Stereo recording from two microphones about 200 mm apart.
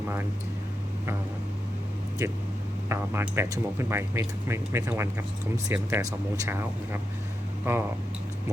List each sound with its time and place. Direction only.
2.9 s speech: 10° right (ahead or behind)